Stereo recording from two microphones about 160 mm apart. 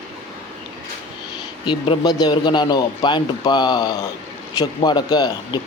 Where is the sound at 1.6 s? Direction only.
30° left (ahead or behind).